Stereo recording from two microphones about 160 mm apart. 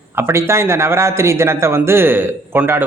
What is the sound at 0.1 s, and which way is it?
A man's voice, 15° right (ahead or behind).